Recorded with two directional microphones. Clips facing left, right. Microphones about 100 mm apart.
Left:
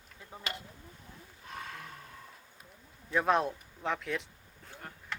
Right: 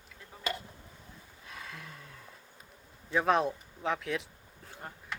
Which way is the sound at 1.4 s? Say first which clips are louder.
Left 3 dB; 50° left (ahead or behind).